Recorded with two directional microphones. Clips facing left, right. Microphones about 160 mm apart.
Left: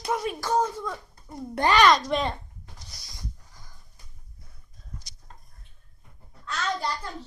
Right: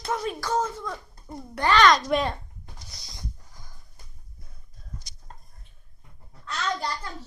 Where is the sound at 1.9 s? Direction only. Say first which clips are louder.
Right 1 dB; centre (ahead or behind).